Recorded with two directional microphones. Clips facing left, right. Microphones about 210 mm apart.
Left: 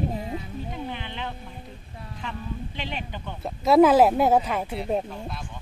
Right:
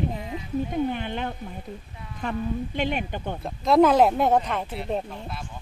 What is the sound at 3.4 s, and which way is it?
A woman's voice, 5° left (ahead or behind).